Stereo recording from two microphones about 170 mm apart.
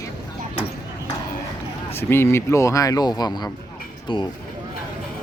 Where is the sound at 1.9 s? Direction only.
15° left (ahead or behind); by 4.2 s 30° left (ahead or behind).